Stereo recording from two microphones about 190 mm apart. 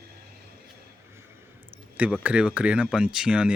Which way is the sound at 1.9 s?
5° right (ahead or behind).